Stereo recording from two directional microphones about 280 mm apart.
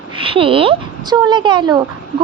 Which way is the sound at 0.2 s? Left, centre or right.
Centre.